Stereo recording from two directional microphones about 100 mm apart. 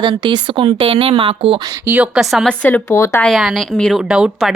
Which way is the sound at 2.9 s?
30° left (ahead or behind).